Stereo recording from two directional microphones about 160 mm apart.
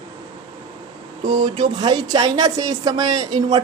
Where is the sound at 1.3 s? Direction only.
30° right (ahead or behind).